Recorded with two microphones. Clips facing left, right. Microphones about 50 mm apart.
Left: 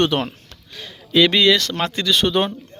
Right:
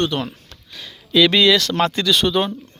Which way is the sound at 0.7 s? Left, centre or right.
Left.